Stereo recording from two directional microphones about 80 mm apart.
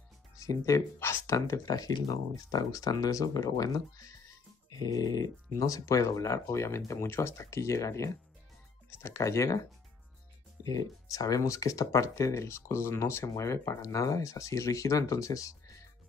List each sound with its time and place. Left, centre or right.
0.4 s speech: left
1.3 s speech: left
10.6 s speech: left